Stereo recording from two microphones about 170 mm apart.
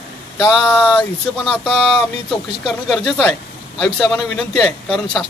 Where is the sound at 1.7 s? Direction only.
Centre (ahead or behind).